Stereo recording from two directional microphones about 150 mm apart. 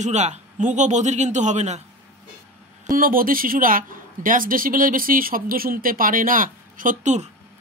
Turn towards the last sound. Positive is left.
turn(degrees=-55)  # may be behind; listen again after turning